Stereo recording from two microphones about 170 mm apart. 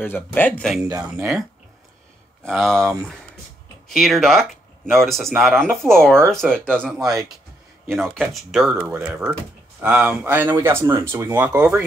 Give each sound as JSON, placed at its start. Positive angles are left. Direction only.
{"t": 0.0, "sound": "speech", "side_deg": 10}
{"t": 0.8, "sound": "speech", "side_deg": -15}
{"t": 2.4, "sound": "speech", "side_deg": 5}
{"t": 3.9, "sound": "speech", "side_deg": 0}